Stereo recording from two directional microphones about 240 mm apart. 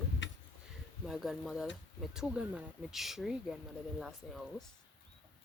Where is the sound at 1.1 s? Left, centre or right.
Centre.